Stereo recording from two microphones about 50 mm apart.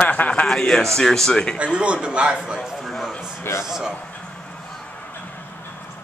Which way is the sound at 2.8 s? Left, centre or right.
Centre.